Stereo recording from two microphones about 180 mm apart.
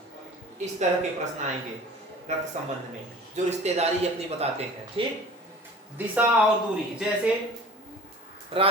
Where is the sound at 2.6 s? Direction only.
40° right (ahead or behind).